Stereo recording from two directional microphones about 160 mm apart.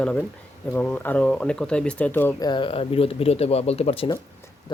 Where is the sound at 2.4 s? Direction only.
30° left (ahead or behind).